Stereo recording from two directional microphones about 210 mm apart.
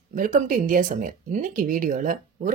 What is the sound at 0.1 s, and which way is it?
Speech, 40° right (ahead or behind).